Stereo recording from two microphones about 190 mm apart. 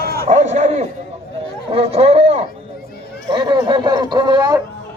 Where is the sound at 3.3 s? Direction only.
25° right (ahead or behind).